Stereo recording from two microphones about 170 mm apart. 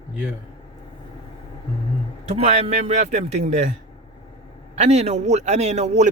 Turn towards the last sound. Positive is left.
turn(degrees=-40)  # may be behind; listen again after turning